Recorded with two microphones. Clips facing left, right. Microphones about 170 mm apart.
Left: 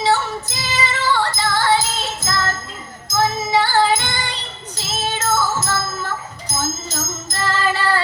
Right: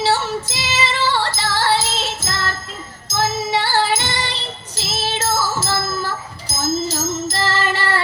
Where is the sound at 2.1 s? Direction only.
30° right (ahead or behind).